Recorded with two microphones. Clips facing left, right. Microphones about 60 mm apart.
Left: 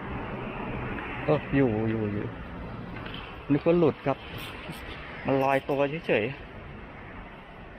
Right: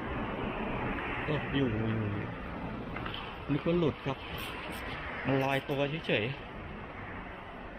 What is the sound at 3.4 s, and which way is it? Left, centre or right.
Speech, left.